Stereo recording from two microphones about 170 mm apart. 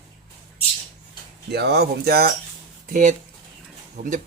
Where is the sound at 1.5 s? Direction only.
70° right (ahead or behind).